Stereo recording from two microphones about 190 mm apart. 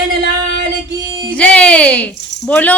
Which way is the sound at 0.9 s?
20° right (ahead or behind).